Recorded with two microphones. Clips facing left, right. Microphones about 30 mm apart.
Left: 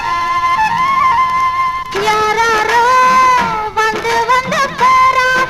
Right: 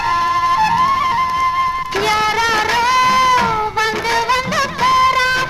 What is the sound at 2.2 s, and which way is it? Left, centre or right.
Music, right.